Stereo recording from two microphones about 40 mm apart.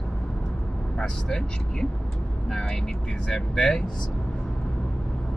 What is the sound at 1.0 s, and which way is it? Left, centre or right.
Speech, centre.